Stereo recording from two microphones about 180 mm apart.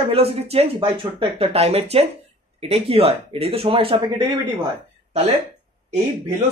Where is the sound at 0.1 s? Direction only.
35° right (ahead or behind).